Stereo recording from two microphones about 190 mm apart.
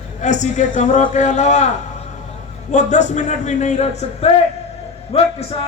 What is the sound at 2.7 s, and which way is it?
A man's voice, 40° left (ahead or behind).